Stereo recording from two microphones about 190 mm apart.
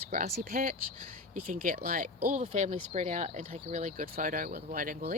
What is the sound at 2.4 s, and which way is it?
Speech, 40° right (ahead or behind).